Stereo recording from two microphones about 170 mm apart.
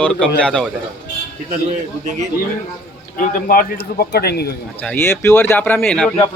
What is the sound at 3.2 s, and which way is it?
Speech, 55° left (ahead or behind).